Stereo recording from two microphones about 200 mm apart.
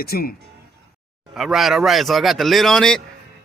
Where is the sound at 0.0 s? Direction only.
50° left (ahead or behind).